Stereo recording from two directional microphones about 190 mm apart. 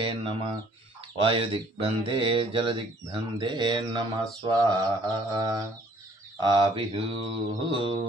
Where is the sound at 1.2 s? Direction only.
30° right (ahead or behind).